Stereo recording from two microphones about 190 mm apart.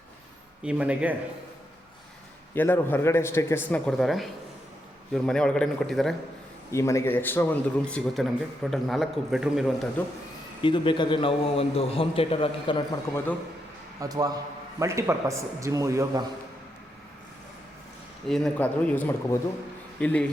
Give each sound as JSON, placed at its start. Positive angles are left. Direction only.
{"t": 0.6, "sound": "a man's voice", "side_deg": -5}
{"t": 2.6, "sound": "a man's voice", "side_deg": 10}
{"t": 6.7, "sound": "a man's voice", "side_deg": 15}
{"t": 10.6, "sound": "a man's voice", "side_deg": 25}
{"t": 14.0, "sound": "a man's voice", "side_deg": -20}
{"t": 18.3, "sound": "speech", "side_deg": 0}